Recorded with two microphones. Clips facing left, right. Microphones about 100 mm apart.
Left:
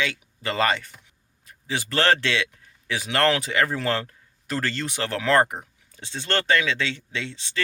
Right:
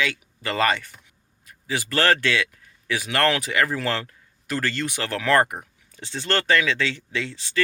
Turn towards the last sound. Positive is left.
turn(degrees=25)  # may be behind; listen again after turning